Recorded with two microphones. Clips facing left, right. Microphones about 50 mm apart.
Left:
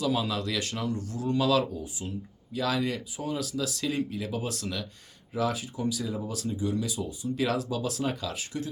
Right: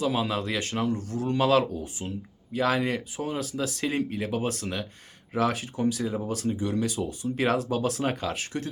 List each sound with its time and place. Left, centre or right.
0.0 s speech: right
5.3 s speech: right